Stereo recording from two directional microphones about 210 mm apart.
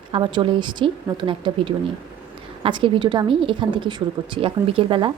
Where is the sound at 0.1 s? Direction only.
20° right (ahead or behind).